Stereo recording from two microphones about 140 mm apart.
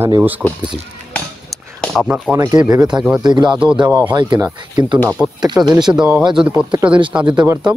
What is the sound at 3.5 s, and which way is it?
Speech, 5° right (ahead or behind).